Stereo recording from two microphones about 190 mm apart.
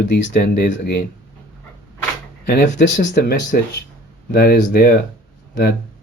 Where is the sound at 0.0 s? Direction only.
65° left (ahead or behind).